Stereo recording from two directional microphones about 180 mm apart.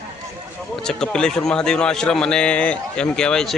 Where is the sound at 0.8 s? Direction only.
5° left (ahead or behind).